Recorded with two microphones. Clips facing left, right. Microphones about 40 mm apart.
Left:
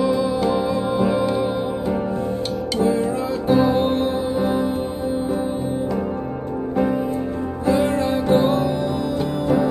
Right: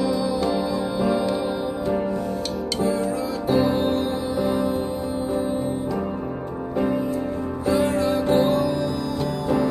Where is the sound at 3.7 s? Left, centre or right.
Left.